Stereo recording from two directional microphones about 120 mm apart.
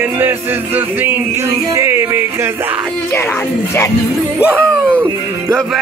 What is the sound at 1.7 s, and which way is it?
Yodeling, 20° right (ahead or behind).